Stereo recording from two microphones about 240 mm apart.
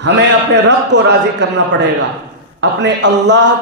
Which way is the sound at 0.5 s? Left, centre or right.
Right.